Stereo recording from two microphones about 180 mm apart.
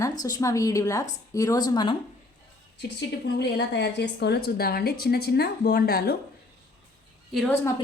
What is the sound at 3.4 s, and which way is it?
A woman's voice, 75° left (ahead or behind).